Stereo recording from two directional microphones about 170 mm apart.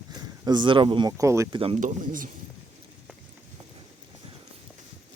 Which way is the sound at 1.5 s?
35° right (ahead or behind).